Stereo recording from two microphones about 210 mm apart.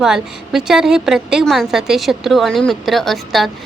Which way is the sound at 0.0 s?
5° right (ahead or behind).